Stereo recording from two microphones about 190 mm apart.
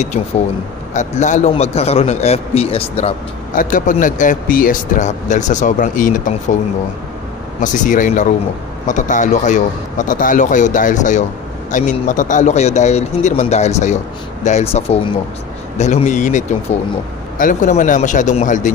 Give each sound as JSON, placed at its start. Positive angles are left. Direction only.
{"t": 0.9, "sound": "speech", "side_deg": 40}
{"t": 3.5, "sound": "speech", "side_deg": 45}
{"t": 7.6, "sound": "speech", "side_deg": 40}